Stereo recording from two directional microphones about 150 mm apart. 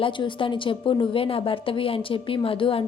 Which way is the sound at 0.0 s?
35° left (ahead or behind).